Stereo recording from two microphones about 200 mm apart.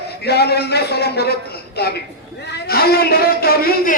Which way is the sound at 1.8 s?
50° left (ahead or behind).